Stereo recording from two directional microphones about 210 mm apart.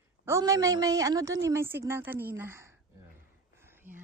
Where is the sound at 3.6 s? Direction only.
10° right (ahead or behind).